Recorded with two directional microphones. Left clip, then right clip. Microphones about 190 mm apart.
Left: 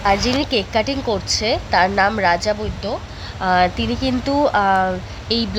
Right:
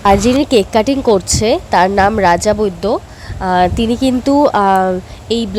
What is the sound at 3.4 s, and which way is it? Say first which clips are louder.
Speech: right 4 dB; 25° right (ahead or behind).